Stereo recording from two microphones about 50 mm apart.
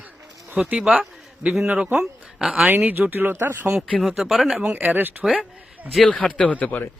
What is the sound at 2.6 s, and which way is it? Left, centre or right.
Speech, right.